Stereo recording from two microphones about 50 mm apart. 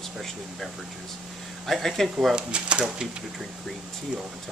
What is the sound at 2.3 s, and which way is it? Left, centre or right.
Speech, right.